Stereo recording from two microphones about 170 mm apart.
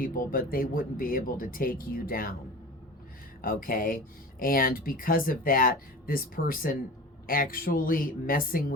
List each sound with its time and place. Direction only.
0.0 s speech: 55° left (ahead or behind)
3.4 s speech: 55° left (ahead or behind)